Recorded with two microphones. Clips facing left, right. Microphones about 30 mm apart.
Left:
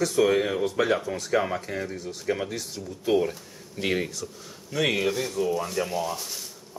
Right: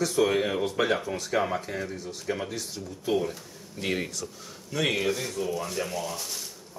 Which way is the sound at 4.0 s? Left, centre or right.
Centre.